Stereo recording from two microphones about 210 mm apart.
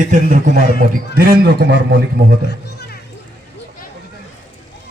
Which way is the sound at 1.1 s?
50° right (ahead or behind).